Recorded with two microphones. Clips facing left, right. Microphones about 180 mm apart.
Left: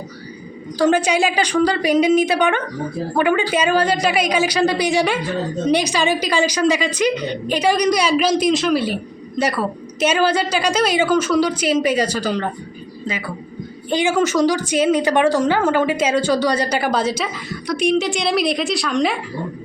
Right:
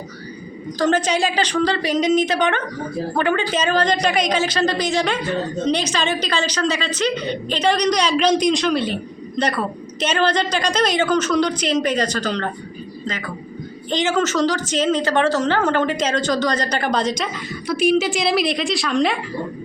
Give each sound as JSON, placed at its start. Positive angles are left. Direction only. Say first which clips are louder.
{"t": 0.8, "sound": "a woman's voice", "louder": "left 2 dB", "side_deg": 10}